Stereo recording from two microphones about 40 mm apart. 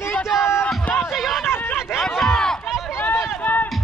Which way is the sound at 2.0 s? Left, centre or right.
Centre.